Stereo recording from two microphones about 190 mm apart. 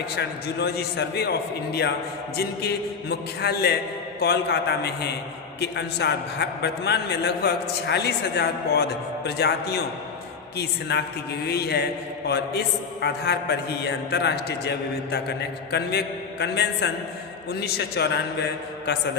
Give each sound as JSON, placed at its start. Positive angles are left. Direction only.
{"t": 0.2, "sound": "a man's voice", "side_deg": 60}
{"t": 5.5, "sound": "a man's voice", "side_deg": 65}